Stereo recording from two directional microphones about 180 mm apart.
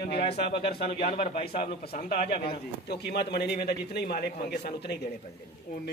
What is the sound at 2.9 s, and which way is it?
A man's voice, 65° left (ahead or behind).